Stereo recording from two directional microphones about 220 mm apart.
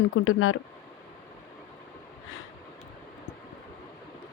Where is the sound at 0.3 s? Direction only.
70° left (ahead or behind).